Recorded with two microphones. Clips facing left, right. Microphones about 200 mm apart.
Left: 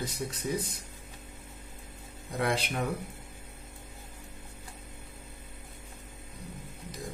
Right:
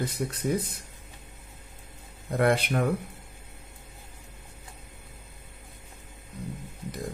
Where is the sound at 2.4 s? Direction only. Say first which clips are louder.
Right 6 dB; 55° right (ahead or behind).